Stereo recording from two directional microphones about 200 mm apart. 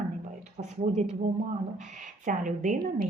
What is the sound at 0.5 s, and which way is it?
Speech, 35° right (ahead or behind).